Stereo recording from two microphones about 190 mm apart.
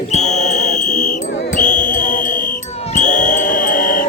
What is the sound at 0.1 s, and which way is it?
Music, 40° left (ahead or behind).